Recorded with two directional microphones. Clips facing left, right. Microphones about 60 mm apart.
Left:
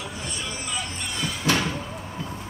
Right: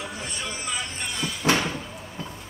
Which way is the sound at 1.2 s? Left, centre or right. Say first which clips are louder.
Left 1 dB; centre.